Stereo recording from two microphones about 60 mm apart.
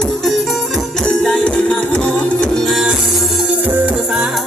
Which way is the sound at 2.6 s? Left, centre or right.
Centre.